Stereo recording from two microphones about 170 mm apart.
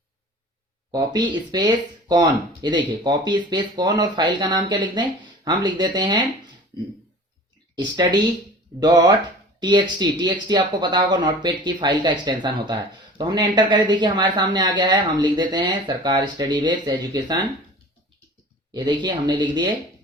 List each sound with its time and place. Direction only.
0.9 s speech: 25° right (ahead or behind)
7.8 s speech: 25° right (ahead or behind)
18.7 s speech: 25° right (ahead or behind)